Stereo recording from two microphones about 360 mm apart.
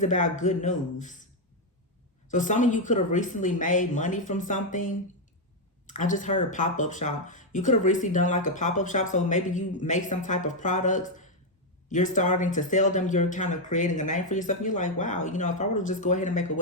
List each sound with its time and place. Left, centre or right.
0.0 s speech: left
2.3 s speech: left